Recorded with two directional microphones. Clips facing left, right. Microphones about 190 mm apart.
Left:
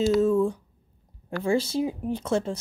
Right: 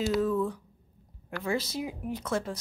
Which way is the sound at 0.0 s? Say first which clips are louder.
Left 6 dB; 30° left (ahead or behind).